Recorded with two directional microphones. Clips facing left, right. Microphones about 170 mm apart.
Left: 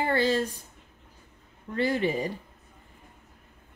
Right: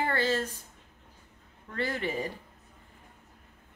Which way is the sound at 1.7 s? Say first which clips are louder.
Left 6 dB; 15° left (ahead or behind).